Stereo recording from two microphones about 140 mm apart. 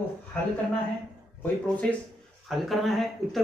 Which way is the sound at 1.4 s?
10° left (ahead or behind).